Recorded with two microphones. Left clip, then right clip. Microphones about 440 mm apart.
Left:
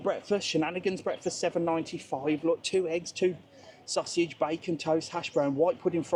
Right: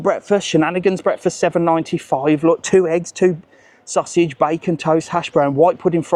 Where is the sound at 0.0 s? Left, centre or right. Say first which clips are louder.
Right 12 dB; right.